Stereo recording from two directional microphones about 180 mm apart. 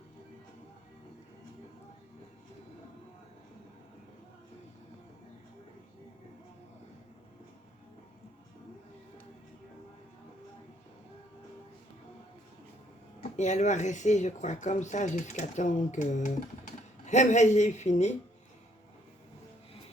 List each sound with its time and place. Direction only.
13.3 s speech: 40° left (ahead or behind)